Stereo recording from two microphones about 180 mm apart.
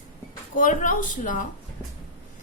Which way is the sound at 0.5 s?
45° left (ahead or behind).